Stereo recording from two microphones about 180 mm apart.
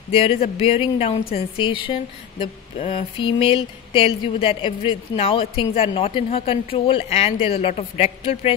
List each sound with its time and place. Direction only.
0.1 s speech: 30° left (ahead or behind)